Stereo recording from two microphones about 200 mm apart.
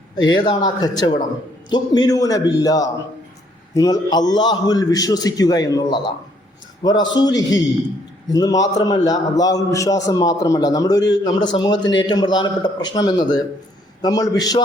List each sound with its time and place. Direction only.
0.3 s a man's voice: 20° left (ahead or behind)